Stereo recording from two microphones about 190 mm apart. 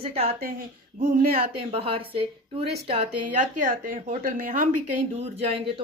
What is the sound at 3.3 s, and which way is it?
Speech, 40° right (ahead or behind).